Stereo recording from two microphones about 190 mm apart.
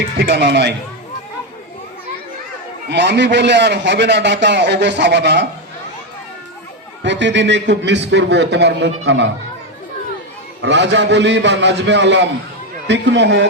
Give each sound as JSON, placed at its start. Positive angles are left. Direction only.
{"t": 0.2, "sound": "a man's voice", "side_deg": -65}
{"t": 2.9, "sound": "a man's voice", "side_deg": -65}
{"t": 7.0, "sound": "a man's voice", "side_deg": -70}
{"t": 10.6, "sound": "a man's voice", "side_deg": -70}